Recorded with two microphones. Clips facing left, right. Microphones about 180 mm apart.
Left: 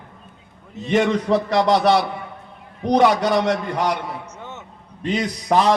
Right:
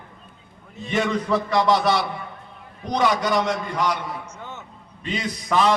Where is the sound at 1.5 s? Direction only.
70° left (ahead or behind).